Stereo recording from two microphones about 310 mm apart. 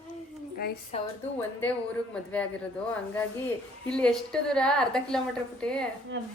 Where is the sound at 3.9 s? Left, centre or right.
Centre.